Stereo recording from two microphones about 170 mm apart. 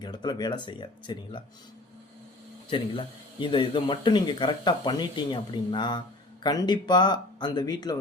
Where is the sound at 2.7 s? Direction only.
30° left (ahead or behind).